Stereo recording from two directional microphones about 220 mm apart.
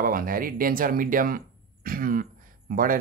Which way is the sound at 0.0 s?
40° right (ahead or behind).